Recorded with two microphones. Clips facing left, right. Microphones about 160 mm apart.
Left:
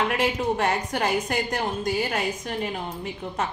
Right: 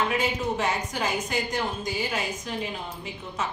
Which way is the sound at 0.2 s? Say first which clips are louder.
Left 3 dB; 55° left (ahead or behind).